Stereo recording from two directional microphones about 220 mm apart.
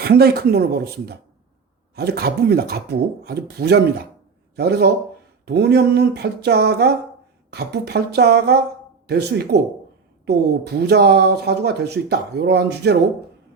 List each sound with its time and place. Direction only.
0.0 s speech: 45° right (ahead or behind)